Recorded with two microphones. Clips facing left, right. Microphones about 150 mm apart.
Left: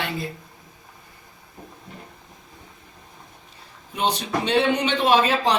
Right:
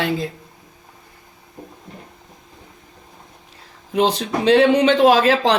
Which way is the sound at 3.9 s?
90° right.